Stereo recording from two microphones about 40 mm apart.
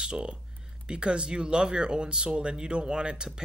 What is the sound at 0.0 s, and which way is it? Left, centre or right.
Speech, right.